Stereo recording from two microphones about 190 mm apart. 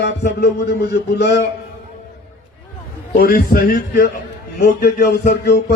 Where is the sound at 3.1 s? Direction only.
50° left (ahead or behind).